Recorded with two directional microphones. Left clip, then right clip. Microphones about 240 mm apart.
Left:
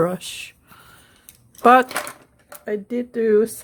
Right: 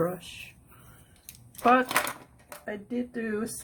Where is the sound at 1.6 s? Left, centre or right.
Left.